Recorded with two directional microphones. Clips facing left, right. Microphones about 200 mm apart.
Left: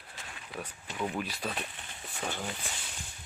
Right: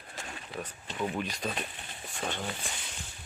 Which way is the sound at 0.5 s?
10° left (ahead or behind).